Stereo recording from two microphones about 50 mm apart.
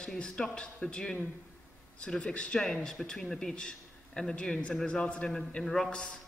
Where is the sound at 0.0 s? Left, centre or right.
Centre.